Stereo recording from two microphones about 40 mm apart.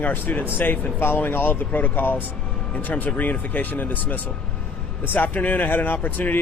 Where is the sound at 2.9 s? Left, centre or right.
Left.